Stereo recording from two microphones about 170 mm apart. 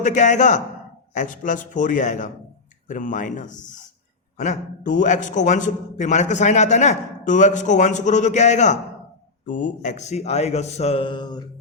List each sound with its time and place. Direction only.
0.0 s a man's voice: 45° left (ahead or behind); by 11.4 s 25° left (ahead or behind)